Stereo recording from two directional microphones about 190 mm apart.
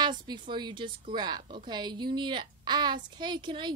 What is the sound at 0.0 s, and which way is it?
A woman's voice, 25° right (ahead or behind).